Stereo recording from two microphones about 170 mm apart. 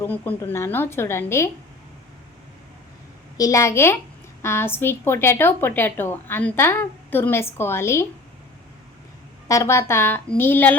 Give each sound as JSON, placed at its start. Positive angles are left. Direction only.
{"t": 0.0, "sound": "a woman's voice", "side_deg": 10}
{"t": 3.3, "sound": "a woman's voice", "side_deg": 20}
{"t": 9.5, "sound": "a woman's voice", "side_deg": 15}